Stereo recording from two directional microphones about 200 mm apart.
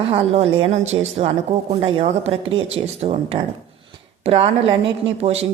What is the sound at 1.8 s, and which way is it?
Speech, 30° right (ahead or behind).